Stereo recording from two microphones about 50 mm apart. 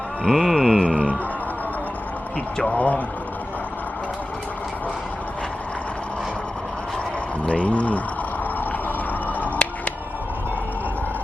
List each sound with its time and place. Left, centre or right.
0.3 s mantra: centre
2.6 s speech: left
7.4 s speech: left
9.4 s a sound: left